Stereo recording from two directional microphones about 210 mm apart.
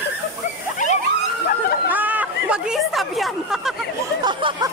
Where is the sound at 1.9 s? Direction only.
10° right (ahead or behind).